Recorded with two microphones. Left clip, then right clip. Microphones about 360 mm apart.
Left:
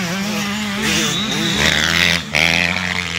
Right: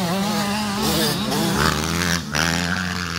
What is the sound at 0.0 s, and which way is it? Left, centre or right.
Vehicle, right.